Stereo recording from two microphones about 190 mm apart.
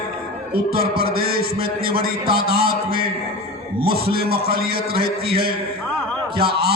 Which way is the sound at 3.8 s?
55° right (ahead or behind).